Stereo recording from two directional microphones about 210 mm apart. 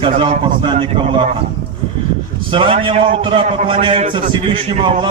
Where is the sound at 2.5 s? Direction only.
25° right (ahead or behind).